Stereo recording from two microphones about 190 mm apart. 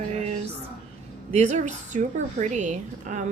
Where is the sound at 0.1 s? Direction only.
35° right (ahead or behind).